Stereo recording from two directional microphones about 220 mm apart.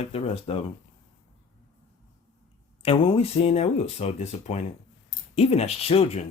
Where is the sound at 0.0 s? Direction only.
30° left (ahead or behind).